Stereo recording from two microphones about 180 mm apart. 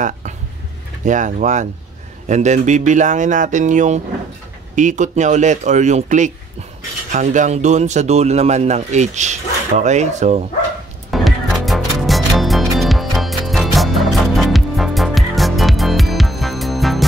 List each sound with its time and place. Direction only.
1.0 s speech: 45° right (ahead or behind)
11.1 s music: centre (ahead or behind)